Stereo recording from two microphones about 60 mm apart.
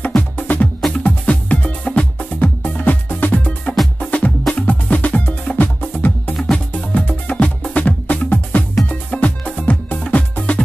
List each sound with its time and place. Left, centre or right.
0.0 s music: left
4.0 s music: centre
6.3 s music: centre
6.7 s music: left